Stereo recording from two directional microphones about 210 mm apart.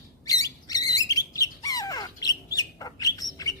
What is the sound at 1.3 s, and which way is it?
Bird, 15° left (ahead or behind).